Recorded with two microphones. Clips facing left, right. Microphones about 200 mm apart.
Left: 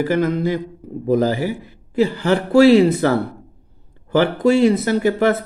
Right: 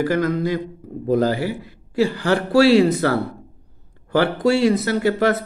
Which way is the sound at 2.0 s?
20° left (ahead or behind).